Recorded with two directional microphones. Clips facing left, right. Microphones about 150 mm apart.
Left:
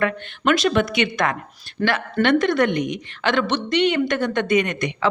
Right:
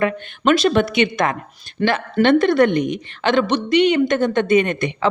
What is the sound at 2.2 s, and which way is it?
A woman's voice, 30° right (ahead or behind).